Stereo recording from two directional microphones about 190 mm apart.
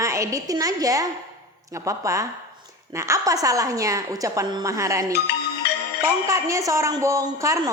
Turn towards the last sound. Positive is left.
turn(degrees=-15)  # may be behind; listen again after turning